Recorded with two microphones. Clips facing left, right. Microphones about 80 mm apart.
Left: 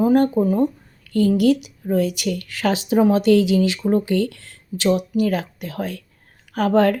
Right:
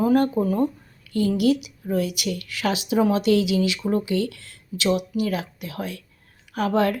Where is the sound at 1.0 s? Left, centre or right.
Left.